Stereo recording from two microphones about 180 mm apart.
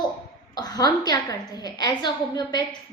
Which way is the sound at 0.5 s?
20° left (ahead or behind).